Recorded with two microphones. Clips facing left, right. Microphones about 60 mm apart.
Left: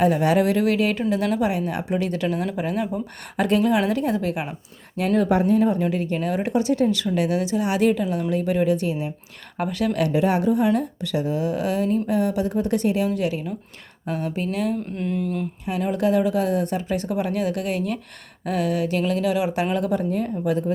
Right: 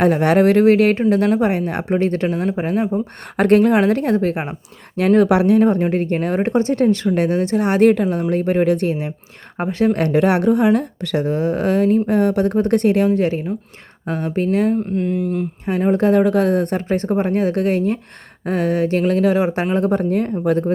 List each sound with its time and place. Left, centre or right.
0.0 s speech: right
3.3 s speech: right
4.9 s speech: right
9.6 s speech: right
13.1 s speech: right
14.9 s a sound: centre
15.6 s speech: right